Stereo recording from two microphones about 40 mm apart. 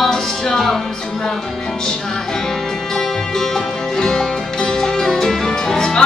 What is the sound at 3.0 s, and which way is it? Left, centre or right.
Music, centre.